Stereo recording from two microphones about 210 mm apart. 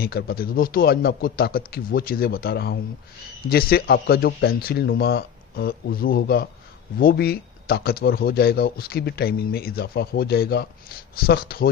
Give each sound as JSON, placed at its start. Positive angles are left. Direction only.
{"t": 0.0, "sound": "speech", "side_deg": 45}